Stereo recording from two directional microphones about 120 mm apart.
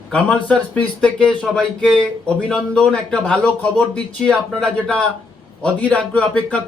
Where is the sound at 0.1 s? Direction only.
10° left (ahead or behind).